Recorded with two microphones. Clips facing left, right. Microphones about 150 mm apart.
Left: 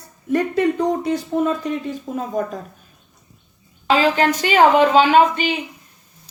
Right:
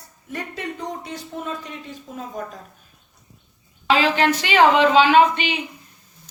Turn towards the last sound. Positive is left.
turn(degrees=40)  # may be behind; listen again after turning